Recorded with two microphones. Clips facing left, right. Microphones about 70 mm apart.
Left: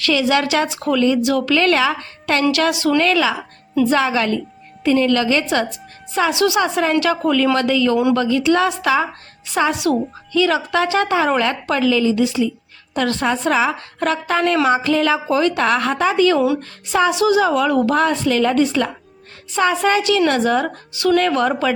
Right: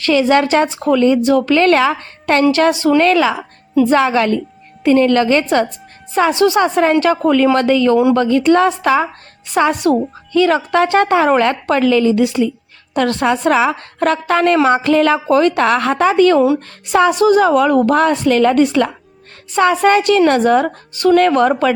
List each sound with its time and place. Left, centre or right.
0.0 s a woman's voice: right